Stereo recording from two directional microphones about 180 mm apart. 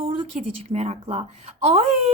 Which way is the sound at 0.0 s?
35° right (ahead or behind).